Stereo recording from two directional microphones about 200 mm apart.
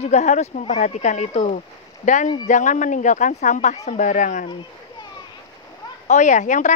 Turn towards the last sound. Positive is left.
turn(degrees=40)  # may be behind; listen again after turning